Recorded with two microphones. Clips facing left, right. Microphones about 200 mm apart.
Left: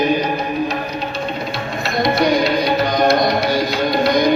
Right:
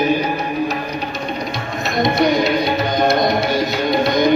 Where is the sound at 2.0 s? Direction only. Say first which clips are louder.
Even; 20° right (ahead or behind).